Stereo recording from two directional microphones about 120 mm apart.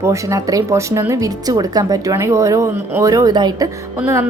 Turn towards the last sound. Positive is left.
turn(degrees=-20)  # may be behind; listen again after turning